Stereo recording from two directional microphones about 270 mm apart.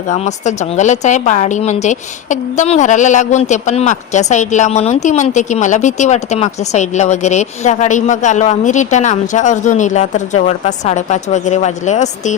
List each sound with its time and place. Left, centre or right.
0.1 s a woman's voice: left